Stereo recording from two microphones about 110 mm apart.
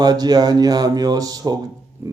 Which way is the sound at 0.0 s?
40° right (ahead or behind).